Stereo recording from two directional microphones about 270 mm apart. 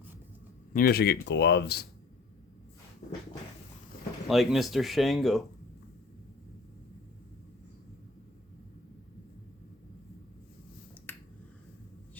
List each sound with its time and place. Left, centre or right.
0.7 s speech: left
3.0 s cupboard open or close: left
4.3 s speech: centre
11.1 s finger snapping: centre